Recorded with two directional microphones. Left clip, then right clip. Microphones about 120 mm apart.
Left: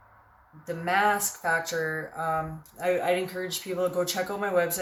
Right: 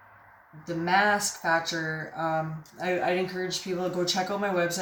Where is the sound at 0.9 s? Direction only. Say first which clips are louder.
Right 1 dB; 20° left (ahead or behind).